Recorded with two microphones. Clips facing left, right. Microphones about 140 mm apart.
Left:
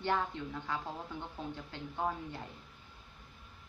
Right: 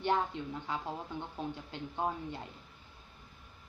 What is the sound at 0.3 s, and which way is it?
Speech, 15° right (ahead or behind).